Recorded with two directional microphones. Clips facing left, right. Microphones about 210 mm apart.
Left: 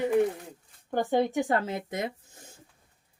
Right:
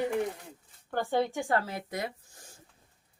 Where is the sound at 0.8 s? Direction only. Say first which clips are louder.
Left 3 dB; 15° left (ahead or behind).